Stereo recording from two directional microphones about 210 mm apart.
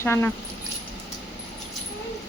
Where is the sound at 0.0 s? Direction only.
10° left (ahead or behind).